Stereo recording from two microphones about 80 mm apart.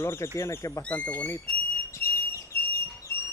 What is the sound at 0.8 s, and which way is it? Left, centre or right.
Speech, centre.